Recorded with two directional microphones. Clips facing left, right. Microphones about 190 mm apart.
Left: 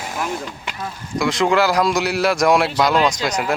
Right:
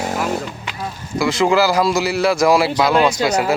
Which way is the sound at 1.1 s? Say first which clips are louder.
Right 2 dB; centre (ahead or behind).